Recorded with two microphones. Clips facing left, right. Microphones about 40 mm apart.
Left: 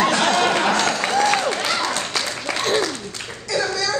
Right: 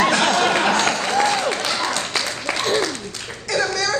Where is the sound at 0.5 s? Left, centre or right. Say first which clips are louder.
Right 1 dB; centre.